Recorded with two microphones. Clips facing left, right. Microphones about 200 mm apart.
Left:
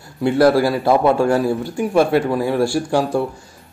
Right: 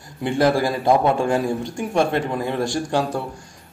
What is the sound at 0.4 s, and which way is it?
Speech, 15° right (ahead or behind).